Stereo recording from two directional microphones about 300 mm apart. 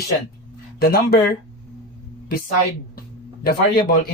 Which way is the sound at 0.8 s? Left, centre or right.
Left.